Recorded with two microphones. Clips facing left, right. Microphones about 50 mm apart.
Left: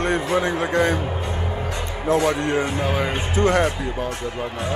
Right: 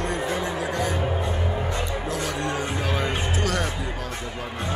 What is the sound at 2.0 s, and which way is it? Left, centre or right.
Speech, left.